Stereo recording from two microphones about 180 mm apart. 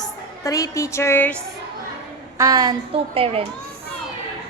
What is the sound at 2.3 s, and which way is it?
A woman's voice, 20° right (ahead or behind).